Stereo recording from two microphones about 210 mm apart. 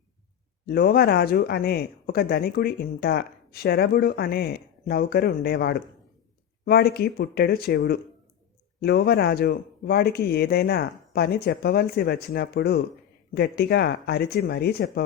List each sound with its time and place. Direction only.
0.6 s speech: 45° left (ahead or behind)